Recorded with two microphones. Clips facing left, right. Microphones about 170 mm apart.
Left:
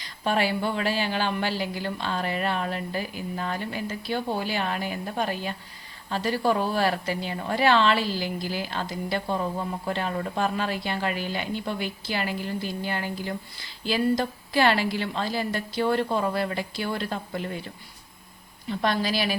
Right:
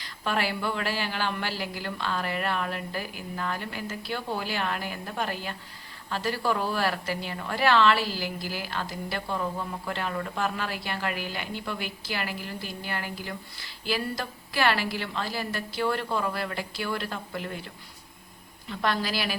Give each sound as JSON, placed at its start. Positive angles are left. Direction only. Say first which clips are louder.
{"t": 0.0, "sound": "speech", "louder": "left 4 dB", "side_deg": 20}
{"t": 18.7, "sound": "speech", "louder": "left 3 dB", "side_deg": 20}